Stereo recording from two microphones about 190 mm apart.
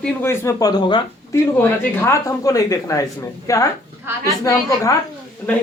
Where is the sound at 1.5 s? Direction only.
10° left (ahead or behind).